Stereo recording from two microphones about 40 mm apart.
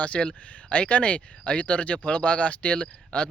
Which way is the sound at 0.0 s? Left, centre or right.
Left.